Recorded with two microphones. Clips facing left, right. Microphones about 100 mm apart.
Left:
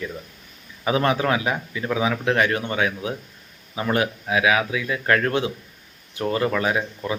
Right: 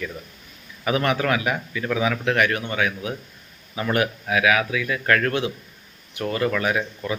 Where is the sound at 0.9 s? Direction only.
25° left (ahead or behind).